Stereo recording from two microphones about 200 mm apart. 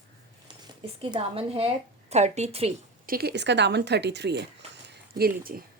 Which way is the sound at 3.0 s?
50° right (ahead or behind).